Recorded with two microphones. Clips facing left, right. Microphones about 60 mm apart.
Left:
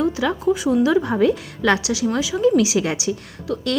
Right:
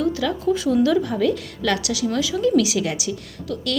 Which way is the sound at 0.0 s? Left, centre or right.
Left.